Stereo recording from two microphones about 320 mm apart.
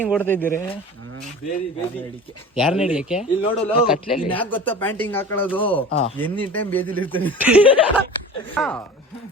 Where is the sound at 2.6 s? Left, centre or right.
Centre.